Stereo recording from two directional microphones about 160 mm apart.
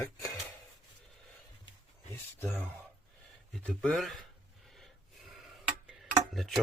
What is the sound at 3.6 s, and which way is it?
Speech, 5° left (ahead or behind).